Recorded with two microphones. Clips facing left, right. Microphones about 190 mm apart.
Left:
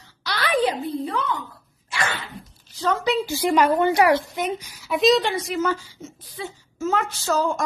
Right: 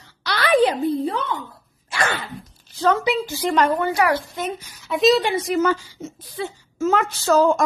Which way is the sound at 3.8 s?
20° left (ahead or behind).